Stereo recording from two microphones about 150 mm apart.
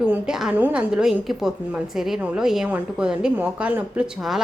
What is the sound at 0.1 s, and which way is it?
A woman's voice, 5° right (ahead or behind).